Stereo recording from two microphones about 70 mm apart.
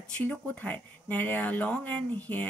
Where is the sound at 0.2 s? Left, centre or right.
Left.